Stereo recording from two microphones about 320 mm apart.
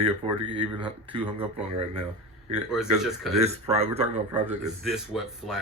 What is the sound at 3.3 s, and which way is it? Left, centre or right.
Speech, centre.